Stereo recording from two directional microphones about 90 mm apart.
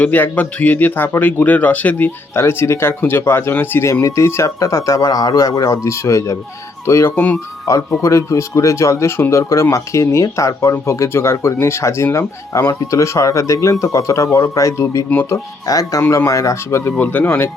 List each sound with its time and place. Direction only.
0.0 s a man's voice: 20° left (ahead or behind)
15.1 s a man's voice: 25° left (ahead or behind)
15.6 s speech: 40° left (ahead or behind)
17.0 s a man's voice: 20° left (ahead or behind)